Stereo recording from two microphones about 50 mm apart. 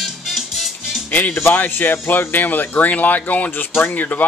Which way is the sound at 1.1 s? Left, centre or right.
Left.